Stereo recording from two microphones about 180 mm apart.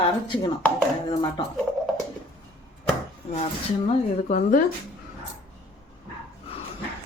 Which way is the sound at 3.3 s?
35° left (ahead or behind).